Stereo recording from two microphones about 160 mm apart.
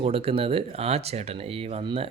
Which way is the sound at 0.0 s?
35° right (ahead or behind).